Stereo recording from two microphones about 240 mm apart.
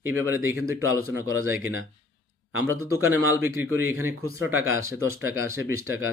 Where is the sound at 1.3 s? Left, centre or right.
Right.